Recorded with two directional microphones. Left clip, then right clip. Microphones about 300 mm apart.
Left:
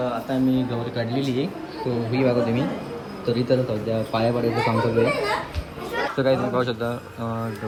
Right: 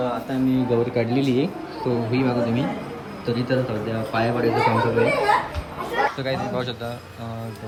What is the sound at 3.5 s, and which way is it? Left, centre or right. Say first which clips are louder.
Speech: left 2 dB; centre.